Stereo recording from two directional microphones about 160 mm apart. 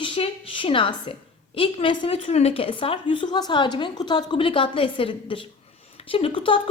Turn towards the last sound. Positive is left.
turn(degrees=35)  # may be behind; listen again after turning